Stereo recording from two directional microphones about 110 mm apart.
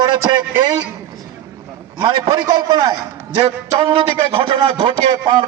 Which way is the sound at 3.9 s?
55° right (ahead or behind).